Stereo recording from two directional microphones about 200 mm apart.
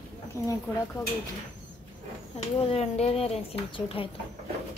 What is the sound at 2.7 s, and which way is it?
A woman's voice, 30° left (ahead or behind).